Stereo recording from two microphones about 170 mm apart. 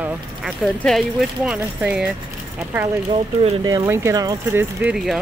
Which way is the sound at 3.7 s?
20° right (ahead or behind).